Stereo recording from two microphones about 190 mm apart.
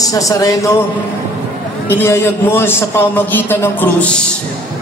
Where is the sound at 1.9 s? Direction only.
10° left (ahead or behind).